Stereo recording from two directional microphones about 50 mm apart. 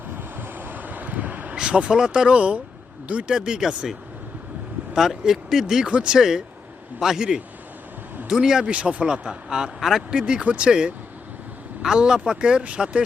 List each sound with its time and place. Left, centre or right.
0.3 s vehicle: right
1.5 s speech: centre
4.9 s speech: centre
5.8 s speech: right
8.6 s speech: right